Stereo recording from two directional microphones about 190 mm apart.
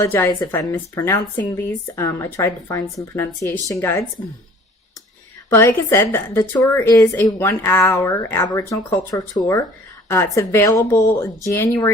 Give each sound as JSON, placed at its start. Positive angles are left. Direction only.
{"t": 0.0, "sound": "a woman's voice", "side_deg": 15}
{"t": 5.5, "sound": "a woman's voice", "side_deg": 10}